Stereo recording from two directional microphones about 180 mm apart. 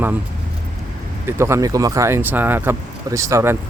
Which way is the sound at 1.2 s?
15° right (ahead or behind).